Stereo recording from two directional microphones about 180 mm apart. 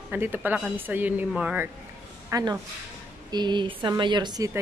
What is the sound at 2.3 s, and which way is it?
A woman's voice, 20° right (ahead or behind).